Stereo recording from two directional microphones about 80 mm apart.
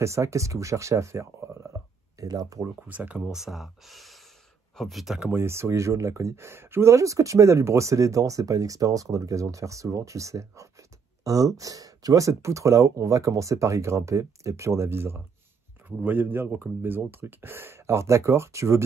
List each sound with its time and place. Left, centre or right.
0.0 s speech: right
2.9 s speech: centre
5.3 s speech: right